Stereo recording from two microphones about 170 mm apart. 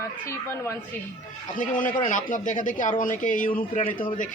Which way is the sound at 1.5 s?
50° left (ahead or behind).